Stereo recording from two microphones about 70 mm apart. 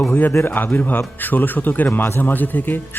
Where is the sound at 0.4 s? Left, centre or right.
Left.